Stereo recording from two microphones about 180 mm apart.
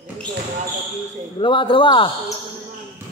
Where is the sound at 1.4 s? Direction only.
30° left (ahead or behind).